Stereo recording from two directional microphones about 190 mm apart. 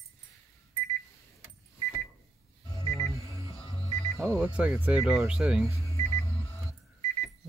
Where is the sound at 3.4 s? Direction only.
25° left (ahead or behind).